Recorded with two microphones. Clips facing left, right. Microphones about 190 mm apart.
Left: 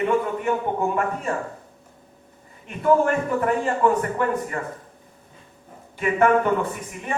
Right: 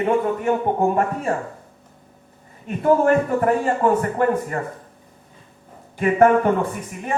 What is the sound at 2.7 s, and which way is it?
A man's voice, 40° right (ahead or behind).